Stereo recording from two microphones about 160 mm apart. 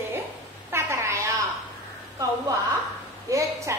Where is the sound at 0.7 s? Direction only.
15° right (ahead or behind).